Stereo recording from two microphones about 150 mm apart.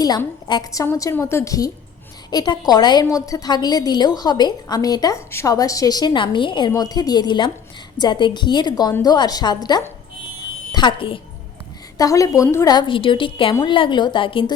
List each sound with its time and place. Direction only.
0.4 s a woman's voice: 30° left (ahead or behind)
11.9 s a woman's voice: 20° left (ahead or behind)
12.7 s a woman's voice: 35° left (ahead or behind)